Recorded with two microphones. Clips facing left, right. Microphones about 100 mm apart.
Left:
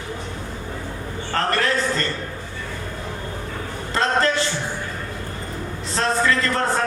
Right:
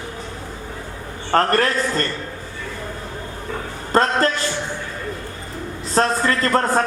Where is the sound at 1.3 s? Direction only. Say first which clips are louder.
Right 5 dB; 45° right (ahead or behind).